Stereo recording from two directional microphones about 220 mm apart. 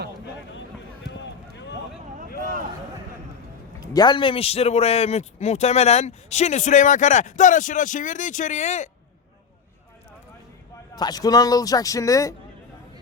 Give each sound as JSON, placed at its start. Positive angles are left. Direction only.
{"t": 2.4, "sound": "a sound", "side_deg": -40}
{"t": 3.9, "sound": "a man's voice", "side_deg": 20}
{"t": 10.9, "sound": "speech", "side_deg": 20}